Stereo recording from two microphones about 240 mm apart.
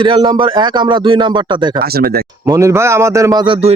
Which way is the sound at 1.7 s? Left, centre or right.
Right.